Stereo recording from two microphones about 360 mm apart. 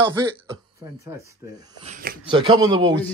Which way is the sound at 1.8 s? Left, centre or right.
Centre.